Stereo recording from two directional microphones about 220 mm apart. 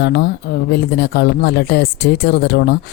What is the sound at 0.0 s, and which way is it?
Speech, 50° left (ahead or behind).